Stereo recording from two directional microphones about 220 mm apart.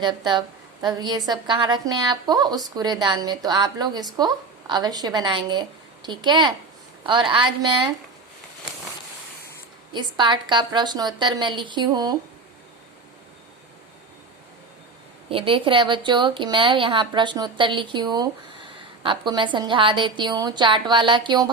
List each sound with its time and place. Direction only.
0.0 s speech: 20° right (ahead or behind)
9.9 s speech: 20° right (ahead or behind)
15.3 s speech: 25° right (ahead or behind)